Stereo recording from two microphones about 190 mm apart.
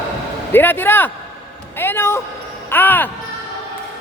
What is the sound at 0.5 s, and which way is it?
Speech, 10° left (ahead or behind).